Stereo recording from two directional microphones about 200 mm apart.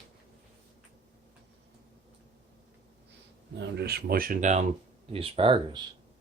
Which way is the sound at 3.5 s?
55° right (ahead or behind).